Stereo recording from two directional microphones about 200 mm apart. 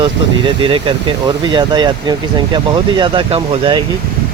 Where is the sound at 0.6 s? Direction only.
25° right (ahead or behind).